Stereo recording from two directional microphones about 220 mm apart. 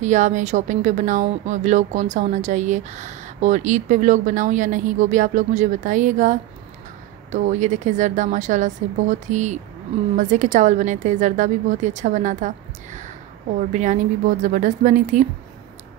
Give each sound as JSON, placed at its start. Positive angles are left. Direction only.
{"t": 0.0, "sound": "speech", "side_deg": -35}
{"t": 14.4, "sound": "speech", "side_deg": -35}